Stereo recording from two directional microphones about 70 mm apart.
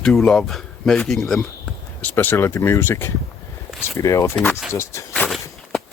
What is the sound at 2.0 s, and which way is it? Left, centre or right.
Speech, left.